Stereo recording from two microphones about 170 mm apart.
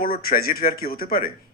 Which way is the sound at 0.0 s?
60° left (ahead or behind).